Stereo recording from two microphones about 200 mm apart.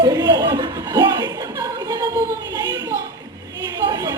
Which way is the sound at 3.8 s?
20° right (ahead or behind).